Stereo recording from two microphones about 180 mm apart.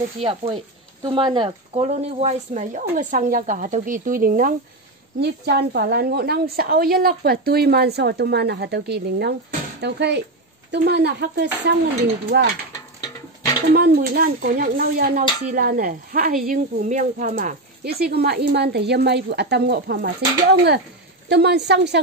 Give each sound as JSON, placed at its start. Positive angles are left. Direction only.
{"t": 0.2, "sound": "speech", "side_deg": -30}
{"t": 5.2, "sound": "a woman's voice", "side_deg": -65}
{"t": 13.7, "sound": "a woman's voice", "side_deg": -60}